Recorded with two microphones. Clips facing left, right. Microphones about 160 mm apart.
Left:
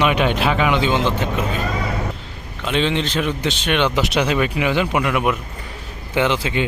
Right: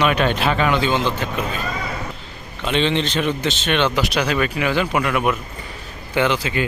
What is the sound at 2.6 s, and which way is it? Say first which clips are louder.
Speech: even; 5° left (ahead or behind).